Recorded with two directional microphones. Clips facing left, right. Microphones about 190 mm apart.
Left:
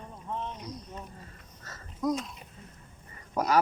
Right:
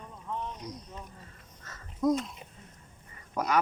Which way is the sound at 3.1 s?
35° left (ahead or behind).